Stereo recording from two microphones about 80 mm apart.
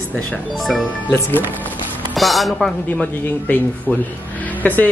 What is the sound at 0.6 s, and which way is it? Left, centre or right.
Speech, centre.